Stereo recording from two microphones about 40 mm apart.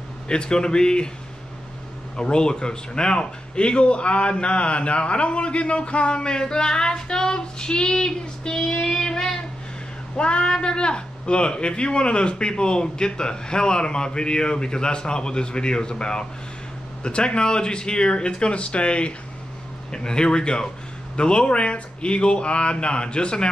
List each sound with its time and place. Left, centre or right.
0.3 s speech: left
2.1 s speech: left
10.1 s speech: left